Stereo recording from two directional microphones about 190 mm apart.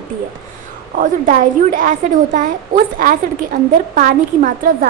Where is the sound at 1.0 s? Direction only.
45° right (ahead or behind).